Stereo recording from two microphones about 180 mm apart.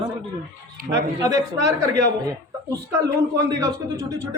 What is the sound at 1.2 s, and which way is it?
Speech, 20° right (ahead or behind).